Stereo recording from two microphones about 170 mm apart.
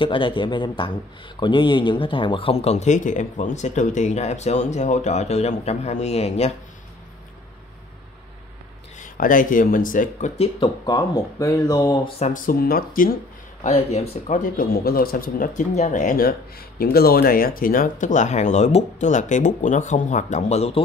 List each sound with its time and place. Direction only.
0.0 s speech: 30° left (ahead or behind)
9.0 s a man's voice: 55° left (ahead or behind)
10.3 s speech: 35° left (ahead or behind)
10.9 s speech: 20° left (ahead or behind)
12.2 s speech: 50° left (ahead or behind)
13.7 s a man's voice: 40° left (ahead or behind)